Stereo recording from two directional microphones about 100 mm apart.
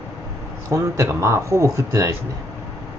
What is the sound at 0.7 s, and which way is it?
Speech, 30° right (ahead or behind).